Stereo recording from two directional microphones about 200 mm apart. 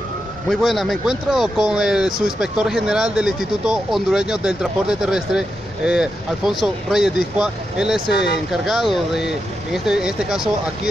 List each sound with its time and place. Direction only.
0.5 s speech: centre (ahead or behind)
8.1 s speech: 55° left (ahead or behind)
8.5 s speech: centre (ahead or behind)